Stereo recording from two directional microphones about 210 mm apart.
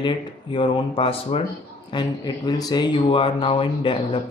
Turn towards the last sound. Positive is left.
turn(degrees=25)  # may be behind; listen again after turning